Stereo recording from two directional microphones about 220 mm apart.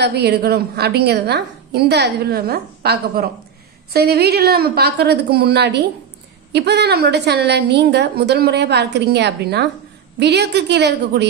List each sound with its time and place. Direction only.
0.0 s a woman's voice: 45° right (ahead or behind)